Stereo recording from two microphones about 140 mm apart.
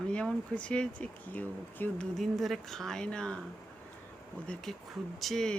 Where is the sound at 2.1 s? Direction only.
Centre (ahead or behind).